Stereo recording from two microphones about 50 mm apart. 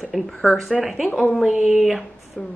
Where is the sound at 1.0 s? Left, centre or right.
Left.